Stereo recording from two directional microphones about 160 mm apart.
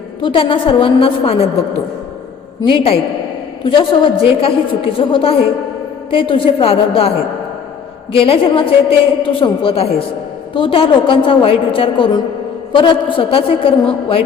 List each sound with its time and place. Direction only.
0.2 s a woman's voice: 30° left (ahead or behind)
2.6 s a woman's voice: 35° left (ahead or behind)
8.1 s a woman's voice: 35° left (ahead or behind)